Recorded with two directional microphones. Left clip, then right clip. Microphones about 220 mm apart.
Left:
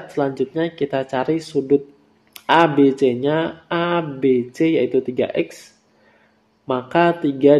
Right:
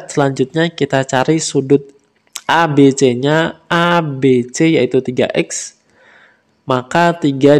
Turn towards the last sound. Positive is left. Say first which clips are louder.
# right 4 dB
turn(degrees=-50)  # may be behind; listen again after turning